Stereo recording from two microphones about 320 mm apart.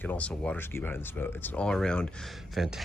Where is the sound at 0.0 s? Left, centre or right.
Centre.